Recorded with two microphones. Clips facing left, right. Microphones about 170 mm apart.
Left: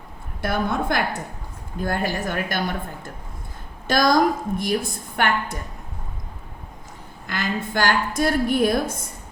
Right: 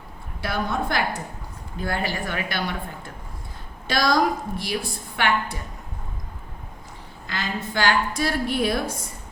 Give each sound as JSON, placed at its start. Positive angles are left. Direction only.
{"t": 0.4, "sound": "a woman's voice", "side_deg": 50}
{"t": 7.3, "sound": "a woman's voice", "side_deg": 50}